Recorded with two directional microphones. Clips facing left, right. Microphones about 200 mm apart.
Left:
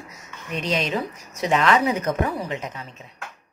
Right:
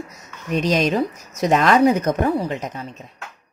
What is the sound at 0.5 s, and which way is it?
A woman's voice, 40° right (ahead or behind).